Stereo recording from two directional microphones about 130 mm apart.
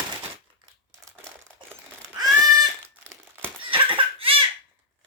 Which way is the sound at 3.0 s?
20° right (ahead or behind).